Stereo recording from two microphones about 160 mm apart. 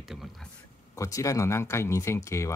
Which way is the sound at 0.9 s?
20° left (ahead or behind).